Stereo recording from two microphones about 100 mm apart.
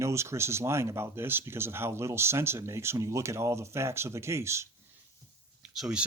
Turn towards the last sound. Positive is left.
turn(degrees=-5)  # may be behind; listen again after turning